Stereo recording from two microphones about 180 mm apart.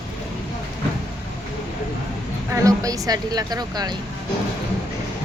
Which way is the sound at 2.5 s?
20° right (ahead or behind).